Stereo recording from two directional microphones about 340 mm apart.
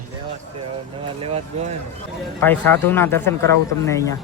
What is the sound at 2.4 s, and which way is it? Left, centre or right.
Speech, centre.